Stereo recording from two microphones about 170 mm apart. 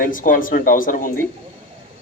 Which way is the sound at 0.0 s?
50° left (ahead or behind).